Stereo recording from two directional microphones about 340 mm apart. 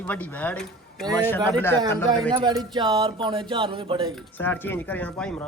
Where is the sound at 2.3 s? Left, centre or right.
Centre.